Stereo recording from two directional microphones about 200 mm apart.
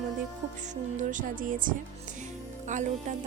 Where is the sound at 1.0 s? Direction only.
40° right (ahead or behind).